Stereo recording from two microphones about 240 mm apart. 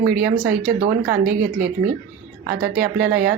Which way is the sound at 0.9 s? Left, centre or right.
Right.